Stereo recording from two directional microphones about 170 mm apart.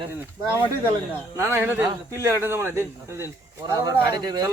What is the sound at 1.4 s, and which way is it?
A man's voice, 10° right (ahead or behind).